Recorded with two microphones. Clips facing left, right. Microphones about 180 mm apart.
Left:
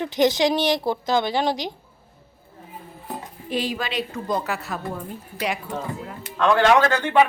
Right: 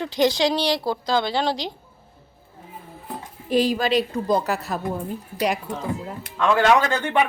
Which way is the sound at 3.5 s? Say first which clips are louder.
Right 6 dB; 40° right (ahead or behind).